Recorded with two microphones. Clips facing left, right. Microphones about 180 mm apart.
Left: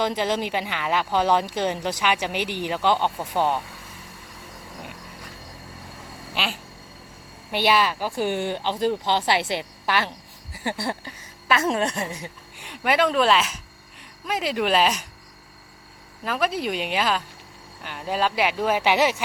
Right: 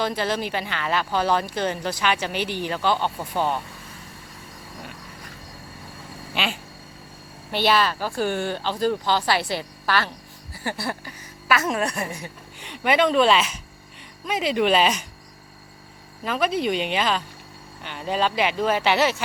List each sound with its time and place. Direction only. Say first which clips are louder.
0.0 s speech: left 1 dB; 15° left (ahead or behind)
6.3 s quack: right 2 dB; centre (ahead or behind)
7.5 s a woman's voice: even; 15° left (ahead or behind)
12.5 s speech: right 1 dB; 5° left (ahead or behind)
16.2 s speech: right 2 dB; centre (ahead or behind)